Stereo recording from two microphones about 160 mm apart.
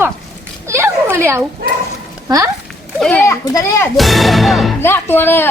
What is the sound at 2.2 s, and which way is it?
Speech, 20° right (ahead or behind).